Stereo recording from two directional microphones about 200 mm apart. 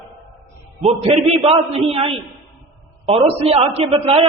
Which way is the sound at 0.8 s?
30° right (ahead or behind).